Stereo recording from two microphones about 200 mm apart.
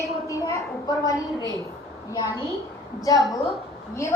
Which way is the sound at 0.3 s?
15° left (ahead or behind).